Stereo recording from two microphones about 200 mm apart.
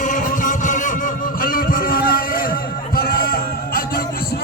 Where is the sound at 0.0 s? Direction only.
40° left (ahead or behind).